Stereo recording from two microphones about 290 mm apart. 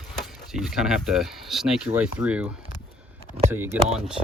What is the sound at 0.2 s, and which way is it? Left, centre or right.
Speech, centre.